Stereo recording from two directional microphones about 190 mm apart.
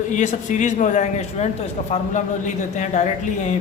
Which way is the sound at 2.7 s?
40° left (ahead or behind).